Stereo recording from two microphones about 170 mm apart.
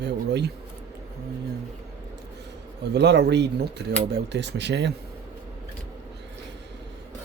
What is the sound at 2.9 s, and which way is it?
Speech, 90° right.